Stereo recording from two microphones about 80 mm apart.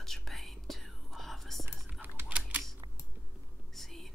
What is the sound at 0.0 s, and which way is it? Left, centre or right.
Whispering, centre.